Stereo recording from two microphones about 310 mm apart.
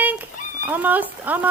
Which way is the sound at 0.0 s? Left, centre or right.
Centre.